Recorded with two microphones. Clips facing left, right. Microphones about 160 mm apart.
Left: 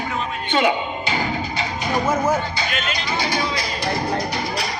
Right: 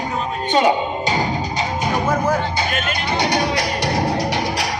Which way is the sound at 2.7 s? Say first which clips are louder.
Right 3 dB; 50° right (ahead or behind).